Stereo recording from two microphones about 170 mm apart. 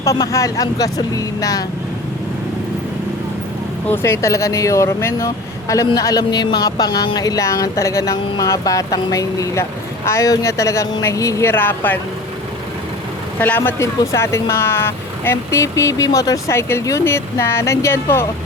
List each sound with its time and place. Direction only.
0.0 s speech: 20° left (ahead or behind)
3.8 s speech: 15° left (ahead or behind)
13.4 s speech: 10° left (ahead or behind)